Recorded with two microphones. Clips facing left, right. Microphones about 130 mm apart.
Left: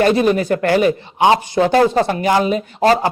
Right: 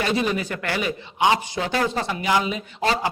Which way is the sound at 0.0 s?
50° left (ahead or behind).